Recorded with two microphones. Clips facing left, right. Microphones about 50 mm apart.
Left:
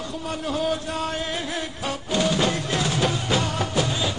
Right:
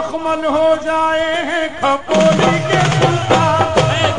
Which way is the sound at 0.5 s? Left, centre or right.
Right.